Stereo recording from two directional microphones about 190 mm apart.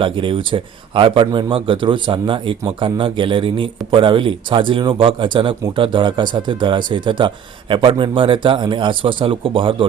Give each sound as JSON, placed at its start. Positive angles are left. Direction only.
{"t": 0.0, "sound": "speech", "side_deg": -25}